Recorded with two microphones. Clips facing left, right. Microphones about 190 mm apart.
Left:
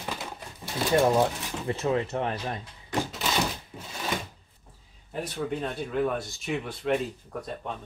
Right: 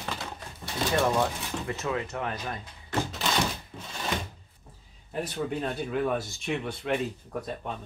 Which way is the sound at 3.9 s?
5° left (ahead or behind).